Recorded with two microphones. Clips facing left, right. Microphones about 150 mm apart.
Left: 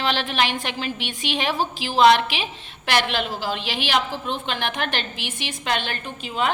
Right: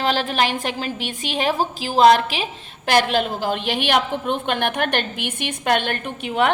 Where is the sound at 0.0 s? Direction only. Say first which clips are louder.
Right 3 dB; 40° right (ahead or behind).